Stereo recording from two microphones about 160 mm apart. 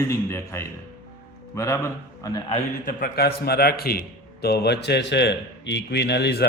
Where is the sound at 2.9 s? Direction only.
65° left (ahead or behind).